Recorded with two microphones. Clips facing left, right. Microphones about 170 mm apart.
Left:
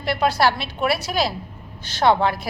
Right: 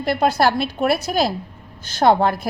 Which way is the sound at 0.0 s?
45° right (ahead or behind).